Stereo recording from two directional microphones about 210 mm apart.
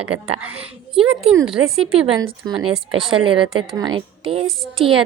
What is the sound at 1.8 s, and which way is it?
A woman's voice, 25° right (ahead or behind).